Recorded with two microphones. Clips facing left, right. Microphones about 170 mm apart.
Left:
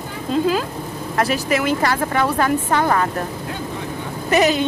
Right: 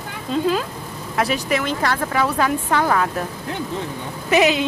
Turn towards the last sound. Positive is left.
turn(degrees=0)  # may be behind; listen again after turning